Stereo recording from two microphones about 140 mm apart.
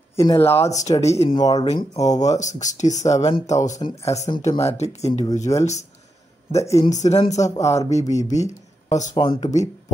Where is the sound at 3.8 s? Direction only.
25° left (ahead or behind).